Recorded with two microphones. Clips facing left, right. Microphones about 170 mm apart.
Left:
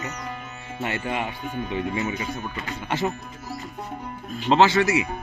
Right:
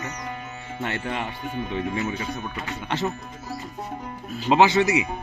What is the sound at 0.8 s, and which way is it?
Speech, 10° left (ahead or behind).